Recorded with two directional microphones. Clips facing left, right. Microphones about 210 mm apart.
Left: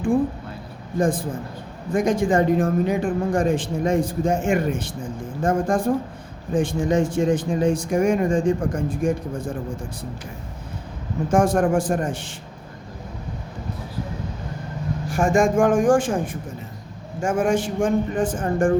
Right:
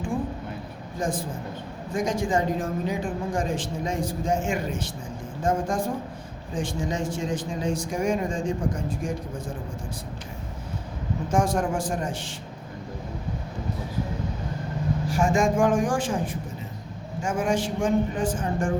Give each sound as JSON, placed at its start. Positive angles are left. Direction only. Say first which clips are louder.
{"t": 0.9, "sound": "speech", "louder": "left 7 dB", "side_deg": 55}
{"t": 11.3, "sound": "speech", "louder": "left 6 dB", "side_deg": 55}
{"t": 15.1, "sound": "speech", "louder": "left 5 dB", "side_deg": 50}